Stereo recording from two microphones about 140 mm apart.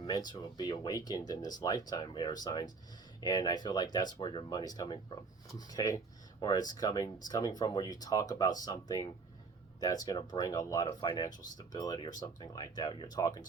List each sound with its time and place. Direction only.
0.0 s speech: 30° left (ahead or behind)